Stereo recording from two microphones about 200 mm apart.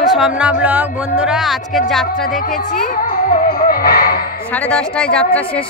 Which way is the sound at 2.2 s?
45° left (ahead or behind).